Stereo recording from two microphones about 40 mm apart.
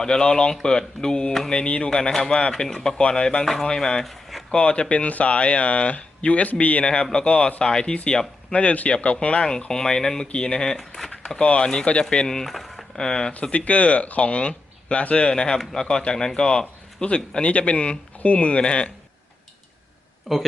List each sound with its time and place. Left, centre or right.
0.0 s speech: centre
2.6 s speech: centre
3.0 s speech: left
3.4 s speech: centre
3.7 s speech: centre
4.0 s a sound: centre
4.5 s speech: left
6.9 s speech: left
8.5 s speech: left; by 11.9 s centre
12.1 s speech: left
12.5 s speech: centre
13.0 s speech: centre
13.7 s speech: left
20.3 s speech: centre